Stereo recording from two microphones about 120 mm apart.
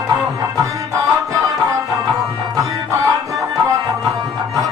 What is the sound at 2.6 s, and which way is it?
Music, 25° right (ahead or behind).